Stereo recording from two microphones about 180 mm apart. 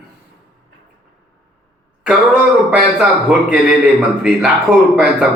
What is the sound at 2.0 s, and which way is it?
A man's voice, 5° right (ahead or behind).